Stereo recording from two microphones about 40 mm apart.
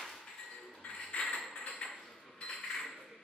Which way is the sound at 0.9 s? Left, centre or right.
Left.